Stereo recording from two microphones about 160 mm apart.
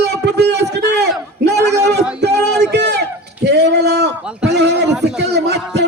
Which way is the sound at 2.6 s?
90° right.